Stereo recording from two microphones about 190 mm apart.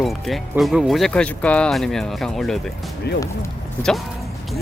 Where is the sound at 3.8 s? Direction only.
Centre (ahead or behind).